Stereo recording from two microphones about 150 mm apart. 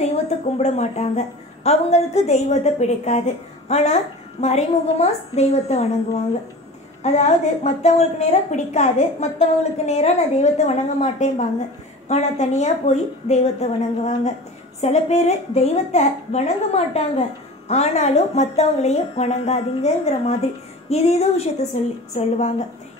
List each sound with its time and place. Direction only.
0.0 s a woman's voice: 45° left (ahead or behind)
7.0 s a woman's voice: 50° left (ahead or behind)